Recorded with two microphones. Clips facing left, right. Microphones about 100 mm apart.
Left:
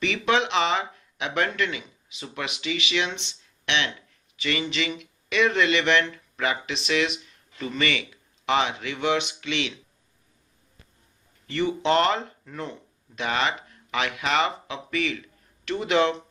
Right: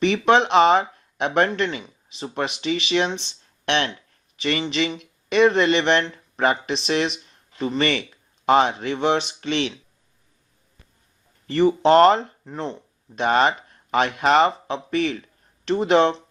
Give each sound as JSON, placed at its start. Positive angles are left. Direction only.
{"t": 0.0, "sound": "speech", "side_deg": -40}
{"t": 11.4, "sound": "speech", "side_deg": -40}
{"t": 12.5, "sound": "speech", "side_deg": -30}
{"t": 13.1, "sound": "speech", "side_deg": -40}